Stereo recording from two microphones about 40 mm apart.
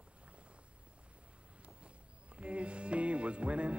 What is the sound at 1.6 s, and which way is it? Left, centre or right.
Speech, right.